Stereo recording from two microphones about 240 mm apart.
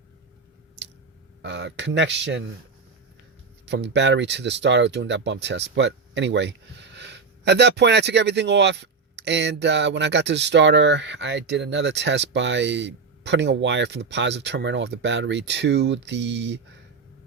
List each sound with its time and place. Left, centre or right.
1.4 s speech: right
3.7 s speech: right